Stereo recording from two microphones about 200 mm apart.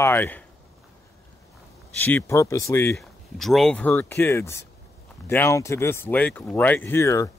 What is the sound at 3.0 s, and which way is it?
Speech, centre (ahead or behind).